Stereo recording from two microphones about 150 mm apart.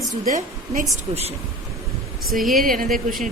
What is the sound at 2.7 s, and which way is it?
Speech, 70° right (ahead or behind).